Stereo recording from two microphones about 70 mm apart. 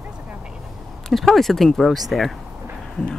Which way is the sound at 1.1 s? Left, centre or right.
Centre.